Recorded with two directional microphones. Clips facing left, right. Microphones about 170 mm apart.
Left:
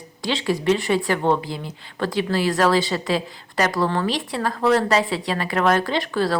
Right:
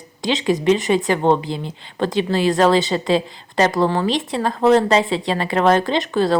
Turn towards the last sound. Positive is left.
turn(degrees=-20)  # may be behind; listen again after turning